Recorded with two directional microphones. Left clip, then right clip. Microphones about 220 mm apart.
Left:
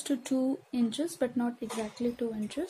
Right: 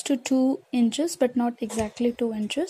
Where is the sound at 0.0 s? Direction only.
30° right (ahead or behind).